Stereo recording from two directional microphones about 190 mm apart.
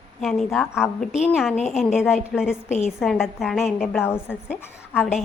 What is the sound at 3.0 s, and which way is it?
A woman's voice, centre (ahead or behind).